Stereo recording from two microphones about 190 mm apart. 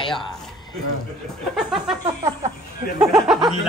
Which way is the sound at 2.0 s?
15° right (ahead or behind).